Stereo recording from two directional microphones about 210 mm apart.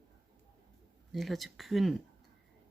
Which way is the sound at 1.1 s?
Centre (ahead or behind).